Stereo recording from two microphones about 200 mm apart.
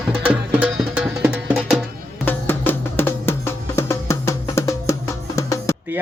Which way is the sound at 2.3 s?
10° left (ahead or behind).